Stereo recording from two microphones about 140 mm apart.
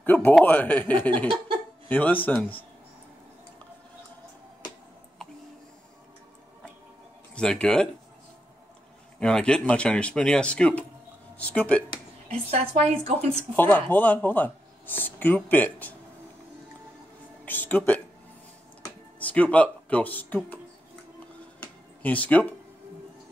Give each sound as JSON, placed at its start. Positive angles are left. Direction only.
{"t": 0.0, "sound": "a man's voice", "side_deg": 15}
{"t": 7.3, "sound": "speech", "side_deg": 5}
{"t": 9.2, "sound": "speech", "side_deg": 5}
{"t": 12.4, "sound": "speech", "side_deg": -50}
{"t": 13.6, "sound": "speech", "side_deg": 15}
{"t": 17.5, "sound": "speech", "side_deg": 10}
{"t": 19.1, "sound": "speech", "side_deg": 10}
{"t": 21.5, "sound": "a sound", "side_deg": 10}